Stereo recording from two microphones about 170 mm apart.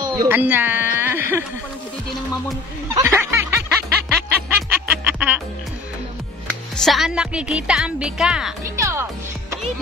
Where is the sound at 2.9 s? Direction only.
15° right (ahead or behind).